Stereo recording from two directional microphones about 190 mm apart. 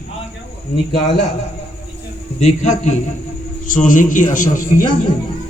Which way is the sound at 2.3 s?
35° left (ahead or behind).